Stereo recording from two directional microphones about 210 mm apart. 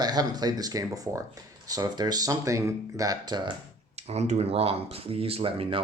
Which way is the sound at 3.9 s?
30° right (ahead or behind).